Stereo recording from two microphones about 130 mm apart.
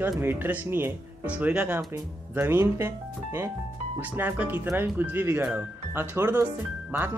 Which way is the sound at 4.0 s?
15° right (ahead or behind).